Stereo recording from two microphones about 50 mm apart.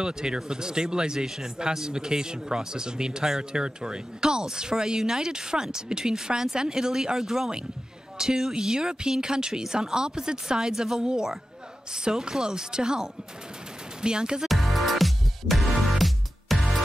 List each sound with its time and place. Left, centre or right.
0.0 s speech: centre
14.5 s music: centre